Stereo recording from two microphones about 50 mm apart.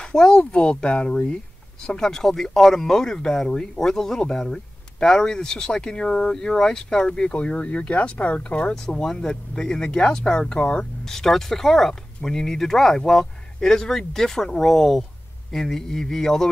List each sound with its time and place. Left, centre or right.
0.0 s speech: centre
2.0 s speech: centre
9.0 s speech: centre
11.1 s speech: centre